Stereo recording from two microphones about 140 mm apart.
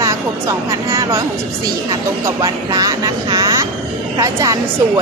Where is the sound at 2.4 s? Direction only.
25° right (ahead or behind).